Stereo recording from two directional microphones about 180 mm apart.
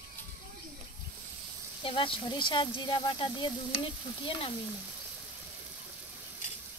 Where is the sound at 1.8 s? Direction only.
30° left (ahead or behind).